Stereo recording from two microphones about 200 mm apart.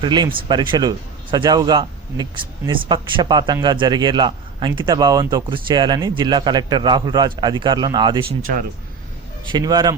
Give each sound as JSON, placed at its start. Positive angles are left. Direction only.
{"t": 0.0, "sound": "a man's voice", "side_deg": -20}
{"t": 9.5, "sound": "a man's voice", "side_deg": -20}